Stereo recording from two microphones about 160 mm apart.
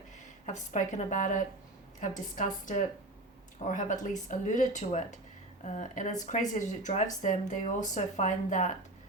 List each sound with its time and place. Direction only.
0.4 s speech: 50° left (ahead or behind)